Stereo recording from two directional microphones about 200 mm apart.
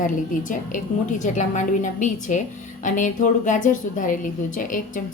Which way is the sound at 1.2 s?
40° left (ahead or behind).